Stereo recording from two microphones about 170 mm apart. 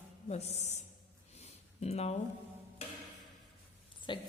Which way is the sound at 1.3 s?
40° left (ahead or behind).